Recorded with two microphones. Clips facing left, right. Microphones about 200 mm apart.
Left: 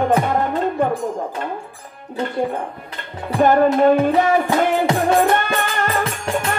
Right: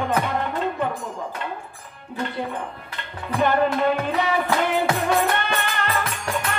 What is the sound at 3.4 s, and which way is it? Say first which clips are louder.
Music: left 7 dB; 45° left (ahead or behind).